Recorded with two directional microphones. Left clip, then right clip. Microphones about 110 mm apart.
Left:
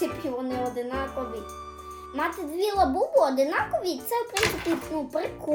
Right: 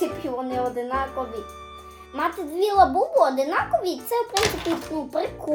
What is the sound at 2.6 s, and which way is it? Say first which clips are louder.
A child's voice: right 6 dB; 15° right (ahead or behind).